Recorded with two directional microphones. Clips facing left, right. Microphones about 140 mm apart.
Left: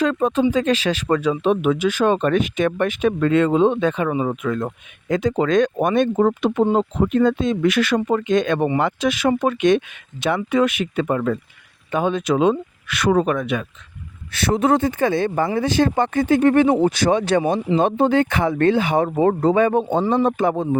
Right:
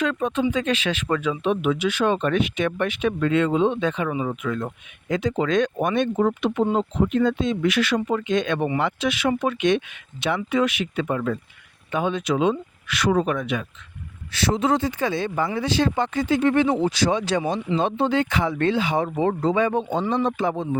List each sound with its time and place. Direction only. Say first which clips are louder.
0.0 s speech: left 5 dB; 40° left (ahead or behind)